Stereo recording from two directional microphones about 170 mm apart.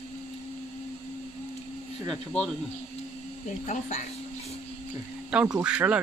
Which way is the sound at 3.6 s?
45° left (ahead or behind).